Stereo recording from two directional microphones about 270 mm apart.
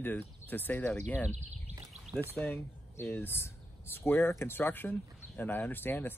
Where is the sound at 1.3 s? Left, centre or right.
Right.